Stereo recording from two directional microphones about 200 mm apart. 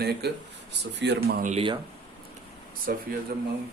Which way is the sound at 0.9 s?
60° right (ahead or behind).